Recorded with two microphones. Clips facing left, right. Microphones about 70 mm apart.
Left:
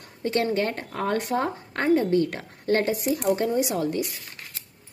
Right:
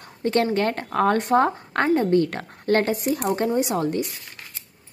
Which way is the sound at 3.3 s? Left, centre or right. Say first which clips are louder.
Even; right.